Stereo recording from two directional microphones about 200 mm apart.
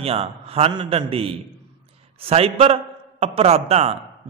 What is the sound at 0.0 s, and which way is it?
A man's voice, 30° right (ahead or behind).